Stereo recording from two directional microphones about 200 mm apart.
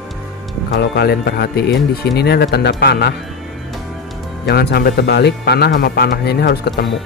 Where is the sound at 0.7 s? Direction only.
55° left (ahead or behind).